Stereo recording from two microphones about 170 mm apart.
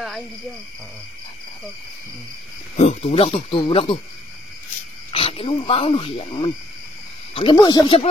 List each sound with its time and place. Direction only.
2.8 s speech: 40° left (ahead or behind)
5.1 s speech: 35° left (ahead or behind)